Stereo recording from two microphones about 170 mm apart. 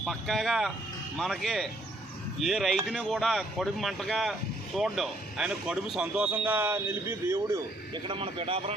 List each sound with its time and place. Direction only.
0.0 s speech: centre (ahead or behind); by 7.6 s 15° right (ahead or behind)
8.0 s a man's voice: 30° right (ahead or behind)